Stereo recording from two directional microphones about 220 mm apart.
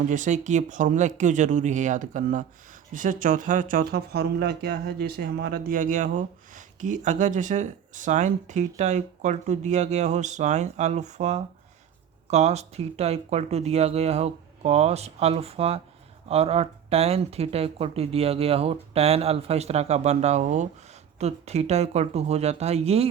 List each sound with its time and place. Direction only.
0.1 s speech: 35° right (ahead or behind)